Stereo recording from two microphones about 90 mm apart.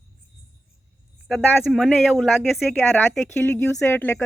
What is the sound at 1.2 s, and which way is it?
A woman's voice, centre (ahead or behind).